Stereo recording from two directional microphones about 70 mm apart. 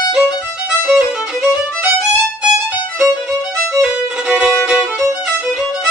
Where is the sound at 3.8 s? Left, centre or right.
Centre.